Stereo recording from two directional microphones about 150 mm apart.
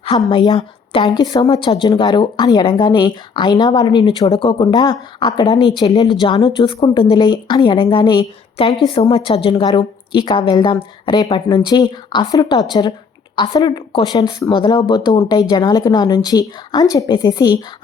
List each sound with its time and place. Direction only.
0.3 s a woman's voice: 35° left (ahead or behind)